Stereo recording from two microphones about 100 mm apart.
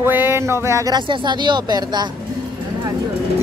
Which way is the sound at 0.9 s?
50° right (ahead or behind).